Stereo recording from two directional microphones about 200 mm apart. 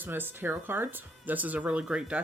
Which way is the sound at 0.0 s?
10° right (ahead or behind).